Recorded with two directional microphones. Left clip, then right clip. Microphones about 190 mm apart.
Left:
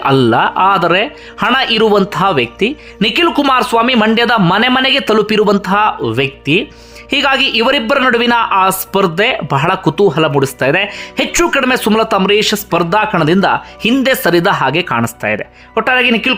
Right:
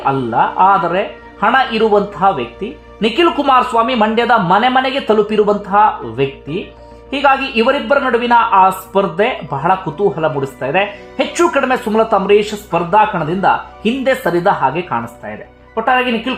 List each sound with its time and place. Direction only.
0.0 s speech: 35° left (ahead or behind)